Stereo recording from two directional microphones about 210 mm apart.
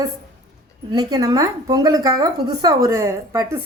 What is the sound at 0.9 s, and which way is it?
A woman's voice, 20° right (ahead or behind).